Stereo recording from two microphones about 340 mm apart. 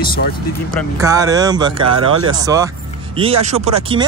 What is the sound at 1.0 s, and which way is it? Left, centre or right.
Speech, centre.